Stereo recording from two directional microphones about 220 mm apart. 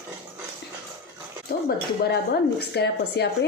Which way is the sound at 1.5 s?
40° left (ahead or behind).